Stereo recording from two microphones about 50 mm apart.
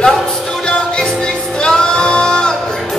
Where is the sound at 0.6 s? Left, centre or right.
Centre.